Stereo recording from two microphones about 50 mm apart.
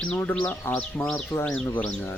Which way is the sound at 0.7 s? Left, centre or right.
Left.